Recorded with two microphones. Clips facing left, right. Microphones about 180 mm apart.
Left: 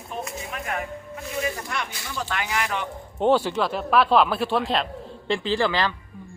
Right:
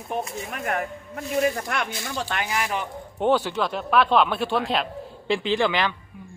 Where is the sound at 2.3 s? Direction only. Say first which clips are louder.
Left 1 dB; 30° right (ahead or behind).